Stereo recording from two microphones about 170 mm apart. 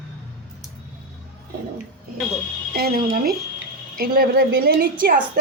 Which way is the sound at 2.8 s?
60° right (ahead or behind).